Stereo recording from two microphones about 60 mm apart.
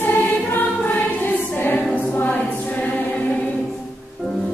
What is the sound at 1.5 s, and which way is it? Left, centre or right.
Choir, left.